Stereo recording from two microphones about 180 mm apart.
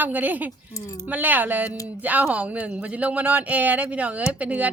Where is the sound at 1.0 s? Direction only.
10° right (ahead or behind).